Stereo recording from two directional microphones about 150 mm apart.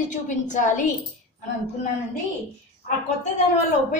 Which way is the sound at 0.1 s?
55° left (ahead or behind).